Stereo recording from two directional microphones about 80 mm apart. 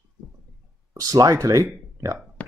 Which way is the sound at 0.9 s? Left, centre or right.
Right.